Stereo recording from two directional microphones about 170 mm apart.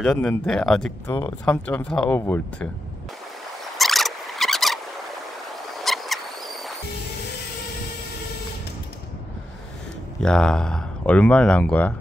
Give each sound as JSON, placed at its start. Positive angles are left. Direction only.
{"t": 0.0, "sound": "speech", "side_deg": 5}
{"t": 1.0, "sound": "speech", "side_deg": 30}
{"t": 1.4, "sound": "speech", "side_deg": 5}
{"t": 3.7, "sound": "zipper", "side_deg": 0}
{"t": 5.5, "sound": "a sound", "side_deg": 0}
{"t": 10.2, "sound": "speech", "side_deg": 5}